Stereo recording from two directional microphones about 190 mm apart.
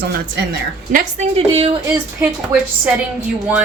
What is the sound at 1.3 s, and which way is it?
Speech, 30° right (ahead or behind).